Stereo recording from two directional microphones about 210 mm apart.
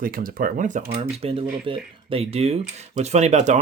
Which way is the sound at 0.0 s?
40° right (ahead or behind).